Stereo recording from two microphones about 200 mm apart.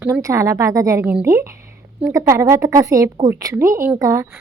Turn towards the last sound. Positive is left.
turn(degrees=-15)  # may be behind; listen again after turning